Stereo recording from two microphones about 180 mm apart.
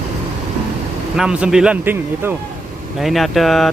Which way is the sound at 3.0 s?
Centre (ahead or behind).